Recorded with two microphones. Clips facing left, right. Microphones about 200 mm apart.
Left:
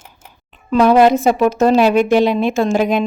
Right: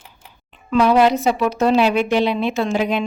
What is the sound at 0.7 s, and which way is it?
A woman's voice, 50° left (ahead or behind).